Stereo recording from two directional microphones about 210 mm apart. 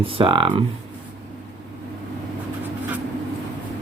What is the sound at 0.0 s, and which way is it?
Speech, 25° right (ahead or behind).